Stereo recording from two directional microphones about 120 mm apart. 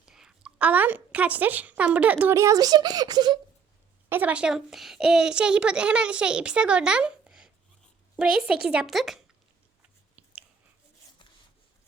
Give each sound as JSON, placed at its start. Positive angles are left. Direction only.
{"t": 0.0, "sound": "a woman's voice", "side_deg": -5}
{"t": 2.3, "sound": "a child's voice", "side_deg": -25}
{"t": 4.1, "sound": "a child's voice", "side_deg": -10}
{"t": 10.2, "sound": "a sound", "side_deg": -15}